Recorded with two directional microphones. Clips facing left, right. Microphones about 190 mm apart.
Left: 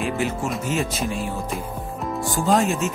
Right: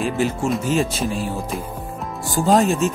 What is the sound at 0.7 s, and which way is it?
Speech, 30° right (ahead or behind).